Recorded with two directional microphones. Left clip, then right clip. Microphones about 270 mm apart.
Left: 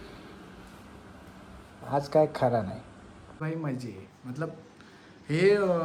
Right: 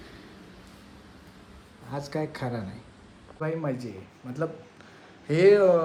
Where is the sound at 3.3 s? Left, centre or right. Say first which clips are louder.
Right 5 dB; centre.